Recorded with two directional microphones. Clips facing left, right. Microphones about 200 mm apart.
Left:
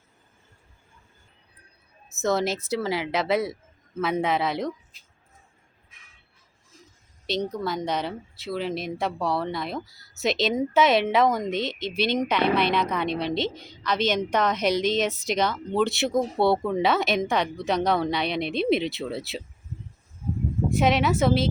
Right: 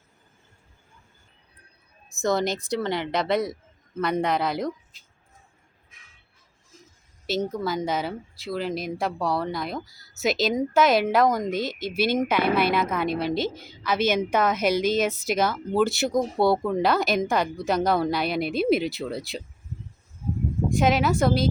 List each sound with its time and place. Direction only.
2.0 s a woman's voice: 5° left (ahead or behind)
7.3 s a woman's voice: 5° right (ahead or behind)
20.7 s a woman's voice: centre (ahead or behind)